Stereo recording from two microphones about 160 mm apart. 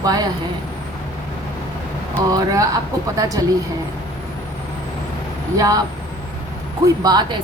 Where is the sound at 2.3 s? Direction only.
20° right (ahead or behind).